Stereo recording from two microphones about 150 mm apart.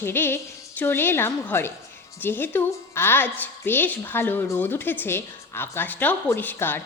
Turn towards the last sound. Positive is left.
turn(degrees=15)  # may be behind; listen again after turning